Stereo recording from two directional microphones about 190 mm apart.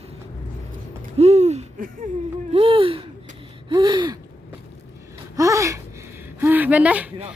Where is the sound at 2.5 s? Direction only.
30° right (ahead or behind).